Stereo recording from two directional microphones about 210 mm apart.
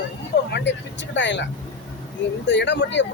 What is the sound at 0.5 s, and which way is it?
Speech, 55° left (ahead or behind).